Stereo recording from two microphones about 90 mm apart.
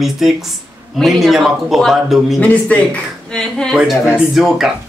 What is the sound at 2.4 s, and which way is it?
A woman's voice, 15° left (ahead or behind).